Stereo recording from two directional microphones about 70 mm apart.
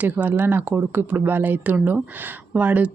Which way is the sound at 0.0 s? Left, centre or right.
Right.